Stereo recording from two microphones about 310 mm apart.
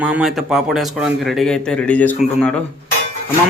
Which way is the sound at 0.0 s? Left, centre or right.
Centre.